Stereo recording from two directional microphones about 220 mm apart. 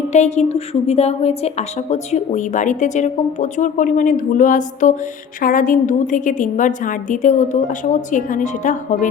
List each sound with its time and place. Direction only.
0.1 s a woman's voice: 30° left (ahead or behind)